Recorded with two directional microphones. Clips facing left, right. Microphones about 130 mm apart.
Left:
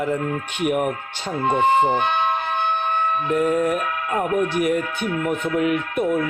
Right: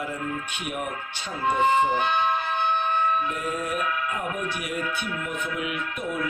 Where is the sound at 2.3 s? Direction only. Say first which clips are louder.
Left 3 dB; 55° left (ahead or behind).